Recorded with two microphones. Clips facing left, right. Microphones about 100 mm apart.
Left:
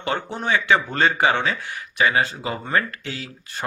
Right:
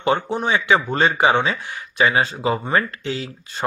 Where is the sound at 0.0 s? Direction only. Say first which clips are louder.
Right 5 dB; 20° right (ahead or behind).